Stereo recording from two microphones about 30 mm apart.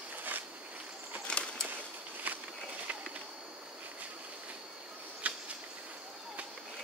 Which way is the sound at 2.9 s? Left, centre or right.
Right.